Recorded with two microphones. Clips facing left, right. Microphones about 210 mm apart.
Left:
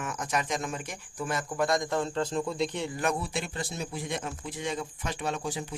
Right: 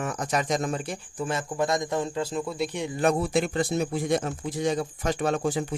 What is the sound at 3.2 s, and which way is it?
Speech, 50° right (ahead or behind).